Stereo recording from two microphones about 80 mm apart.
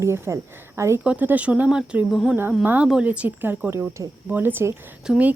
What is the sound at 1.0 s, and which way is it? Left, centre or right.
Speech, right.